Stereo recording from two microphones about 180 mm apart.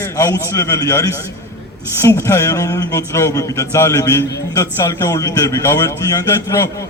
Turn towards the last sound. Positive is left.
turn(degrees=15)  # may be behind; listen again after turning